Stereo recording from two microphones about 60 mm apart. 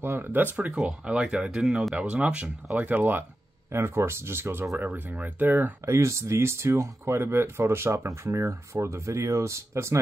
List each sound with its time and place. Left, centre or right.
0.0 s speech: right
0.8 s speech: centre
5.9 s speech: right